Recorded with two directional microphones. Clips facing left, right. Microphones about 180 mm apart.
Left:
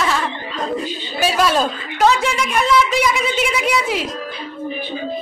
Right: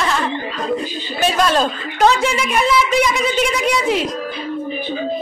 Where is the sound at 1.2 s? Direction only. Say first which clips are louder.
Right 1 dB; 5° left (ahead or behind).